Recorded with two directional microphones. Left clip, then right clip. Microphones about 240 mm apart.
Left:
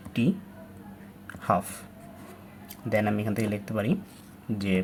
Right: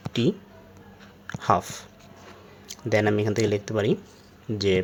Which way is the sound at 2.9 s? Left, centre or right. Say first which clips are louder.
Right 5 dB; right.